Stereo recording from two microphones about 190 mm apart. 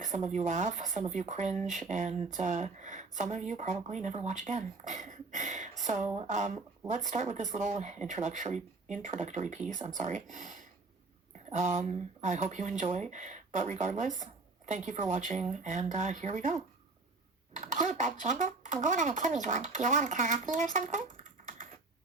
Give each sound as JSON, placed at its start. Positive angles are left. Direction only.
{"t": 0.0, "sound": "speech", "side_deg": -40}